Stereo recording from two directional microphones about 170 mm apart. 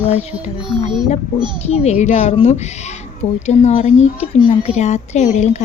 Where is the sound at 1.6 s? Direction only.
40° left (ahead or behind).